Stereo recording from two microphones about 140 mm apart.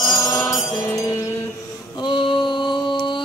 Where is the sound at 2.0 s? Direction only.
35° left (ahead or behind).